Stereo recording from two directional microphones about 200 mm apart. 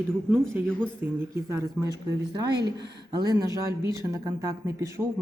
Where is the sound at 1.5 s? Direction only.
15° right (ahead or behind).